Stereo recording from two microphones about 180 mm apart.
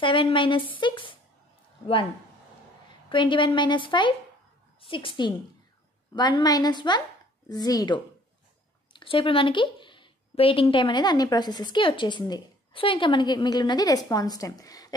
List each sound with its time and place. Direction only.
0.0 s a woman's voice: 30° left (ahead or behind)
3.1 s a woman's voice: 25° left (ahead or behind)